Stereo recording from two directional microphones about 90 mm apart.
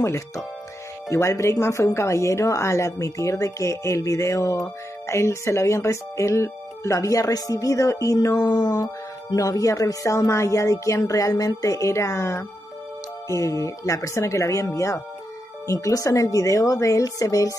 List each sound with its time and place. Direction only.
1.0 s a woman's voice: 35° left (ahead or behind)
8.4 s speech: 50° left (ahead or behind)
9.3 s a woman's voice: 40° left (ahead or behind)